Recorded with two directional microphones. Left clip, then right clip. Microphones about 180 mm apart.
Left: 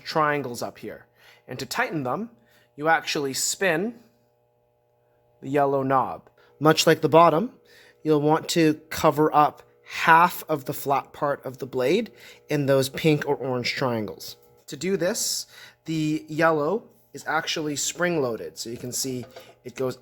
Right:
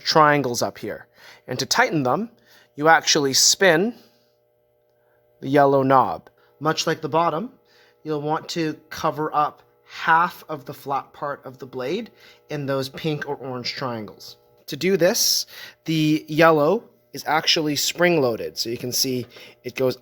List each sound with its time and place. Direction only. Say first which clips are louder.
0.0 s speech: right 7 dB; 50° right (ahead or behind)
5.4 s speech: right 6 dB; 40° right (ahead or behind)
6.6 s speech: left 4 dB; 25° left (ahead or behind)
14.7 s speech: right 6 dB; 40° right (ahead or behind)